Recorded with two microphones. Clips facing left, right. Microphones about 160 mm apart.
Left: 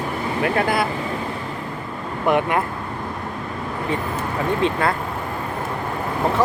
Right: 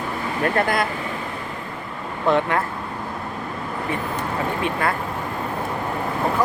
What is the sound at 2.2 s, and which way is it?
Speech, 15° left (ahead or behind).